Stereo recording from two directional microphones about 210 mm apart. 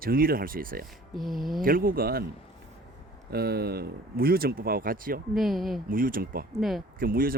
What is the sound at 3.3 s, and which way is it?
Speech, 50° right (ahead or behind).